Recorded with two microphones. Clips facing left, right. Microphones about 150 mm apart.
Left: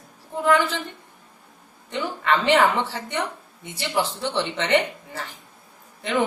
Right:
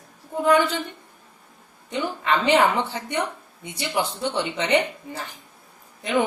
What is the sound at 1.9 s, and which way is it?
A woman's voice, 15° right (ahead or behind).